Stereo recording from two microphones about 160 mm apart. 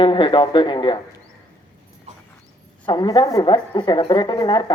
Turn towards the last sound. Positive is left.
turn(degrees=30)  # may be behind; listen again after turning